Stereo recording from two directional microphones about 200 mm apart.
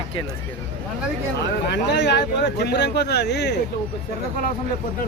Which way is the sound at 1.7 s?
60° left (ahead or behind).